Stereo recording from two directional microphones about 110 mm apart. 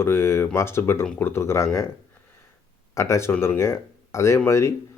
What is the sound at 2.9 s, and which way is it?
Speech, 25° left (ahead or behind).